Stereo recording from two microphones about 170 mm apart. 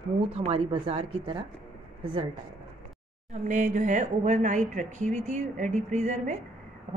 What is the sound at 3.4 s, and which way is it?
A woman's voice, 45° right (ahead or behind).